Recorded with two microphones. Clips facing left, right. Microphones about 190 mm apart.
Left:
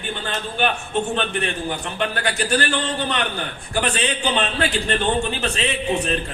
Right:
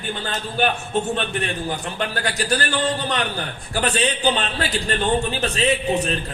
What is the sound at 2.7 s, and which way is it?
A man's voice, 35° right (ahead or behind).